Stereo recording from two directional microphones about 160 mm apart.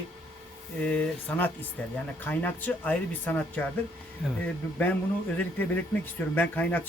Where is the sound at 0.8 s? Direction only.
10° left (ahead or behind).